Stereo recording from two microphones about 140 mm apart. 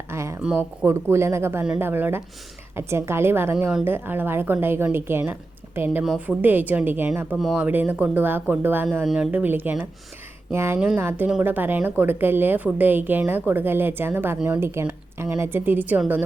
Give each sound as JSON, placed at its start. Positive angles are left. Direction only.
{"t": 0.1, "sound": "a sound", "side_deg": -20}
{"t": 0.4, "sound": "a woman's voice", "side_deg": -5}
{"t": 0.9, "sound": "a woman's voice", "side_deg": -20}
{"t": 7.3, "sound": "a woman's voice", "side_deg": 0}
{"t": 10.8, "sound": "a woman's voice", "side_deg": -5}